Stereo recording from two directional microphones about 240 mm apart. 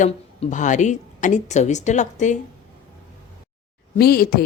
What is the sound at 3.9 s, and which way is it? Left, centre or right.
Speech, left.